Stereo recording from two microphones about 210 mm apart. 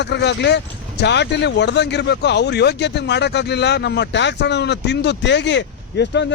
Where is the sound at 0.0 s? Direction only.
55° left (ahead or behind).